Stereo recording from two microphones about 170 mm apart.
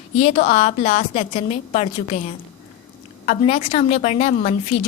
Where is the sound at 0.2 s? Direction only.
40° left (ahead or behind).